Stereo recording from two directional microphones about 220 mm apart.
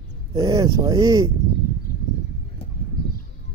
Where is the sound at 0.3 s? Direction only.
15° right (ahead or behind).